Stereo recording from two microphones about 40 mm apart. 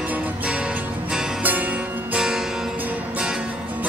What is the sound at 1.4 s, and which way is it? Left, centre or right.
Music, right.